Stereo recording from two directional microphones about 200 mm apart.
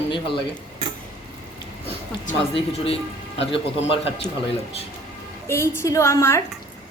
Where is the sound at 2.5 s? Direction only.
25° left (ahead or behind).